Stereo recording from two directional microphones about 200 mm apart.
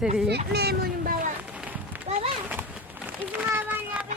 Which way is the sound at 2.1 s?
30° right (ahead or behind).